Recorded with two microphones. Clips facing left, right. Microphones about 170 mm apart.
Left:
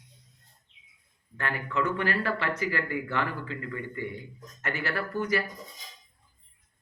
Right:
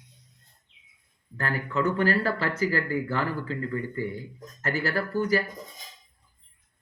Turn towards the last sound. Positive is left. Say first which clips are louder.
# right 4 dB
turn(degrees=-35)  # may be behind; listen again after turning